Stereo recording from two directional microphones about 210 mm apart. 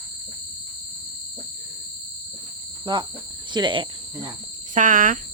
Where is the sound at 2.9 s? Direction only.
20° right (ahead or behind).